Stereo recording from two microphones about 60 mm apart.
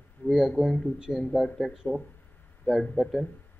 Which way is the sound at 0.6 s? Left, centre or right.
Centre.